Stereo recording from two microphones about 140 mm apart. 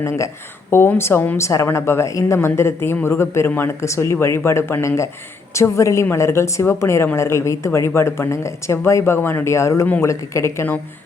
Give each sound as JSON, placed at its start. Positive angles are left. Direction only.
{"t": 0.7, "sound": "a woman's voice", "side_deg": 15}